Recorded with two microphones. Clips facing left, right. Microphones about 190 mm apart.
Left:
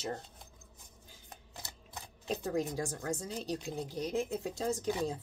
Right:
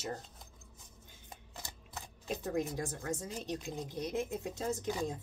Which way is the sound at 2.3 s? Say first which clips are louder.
Left 2 dB; 35° left (ahead or behind).